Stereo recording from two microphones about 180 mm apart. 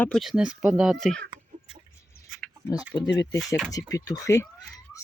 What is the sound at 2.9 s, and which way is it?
Speech, 25° left (ahead or behind).